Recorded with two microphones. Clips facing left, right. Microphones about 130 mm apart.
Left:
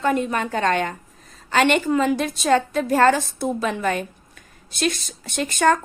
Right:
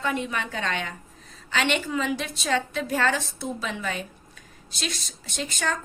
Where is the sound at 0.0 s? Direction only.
45° left (ahead or behind).